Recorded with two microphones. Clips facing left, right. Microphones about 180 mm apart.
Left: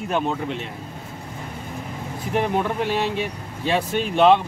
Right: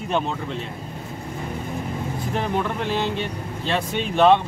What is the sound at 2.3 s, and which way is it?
Speech, 10° left (ahead or behind).